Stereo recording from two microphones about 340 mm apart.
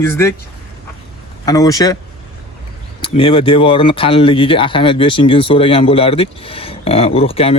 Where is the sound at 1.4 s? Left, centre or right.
Centre.